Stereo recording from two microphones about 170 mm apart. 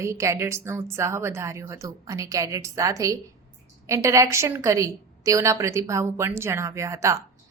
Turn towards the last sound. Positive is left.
turn(degrees=-15)  # may be behind; listen again after turning